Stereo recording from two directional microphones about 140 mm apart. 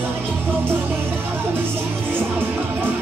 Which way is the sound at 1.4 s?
15° right (ahead or behind).